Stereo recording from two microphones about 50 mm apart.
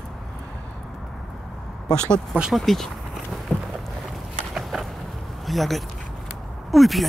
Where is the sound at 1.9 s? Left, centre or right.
Centre.